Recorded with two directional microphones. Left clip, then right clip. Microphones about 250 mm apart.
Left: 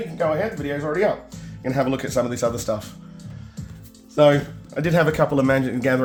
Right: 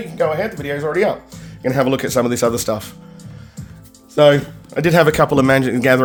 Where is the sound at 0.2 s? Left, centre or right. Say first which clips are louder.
Right 4 dB; right.